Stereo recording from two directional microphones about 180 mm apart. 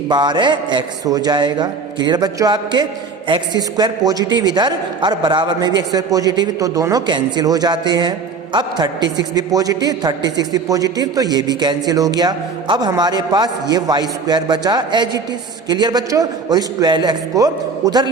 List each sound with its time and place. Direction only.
0.1 s a man's voice: 25° right (ahead or behind)